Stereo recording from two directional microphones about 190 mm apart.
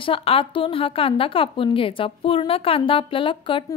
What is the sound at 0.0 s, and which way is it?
A woman's voice, 30° left (ahead or behind).